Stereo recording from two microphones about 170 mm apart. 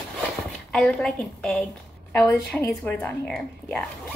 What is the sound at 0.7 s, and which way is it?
A woman's voice, 5° left (ahead or behind).